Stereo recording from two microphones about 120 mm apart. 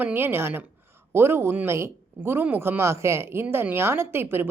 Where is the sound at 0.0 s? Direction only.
15° right (ahead or behind).